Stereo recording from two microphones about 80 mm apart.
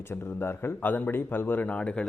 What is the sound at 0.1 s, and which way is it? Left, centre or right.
A man's voice, left.